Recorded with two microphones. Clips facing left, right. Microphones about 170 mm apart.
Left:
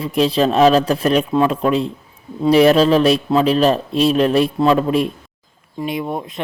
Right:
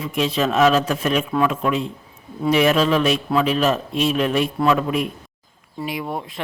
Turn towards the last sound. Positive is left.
turn(degrees=20)  # may be behind; listen again after turning